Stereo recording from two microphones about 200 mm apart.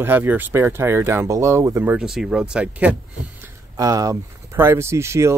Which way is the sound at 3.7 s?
15° right (ahead or behind).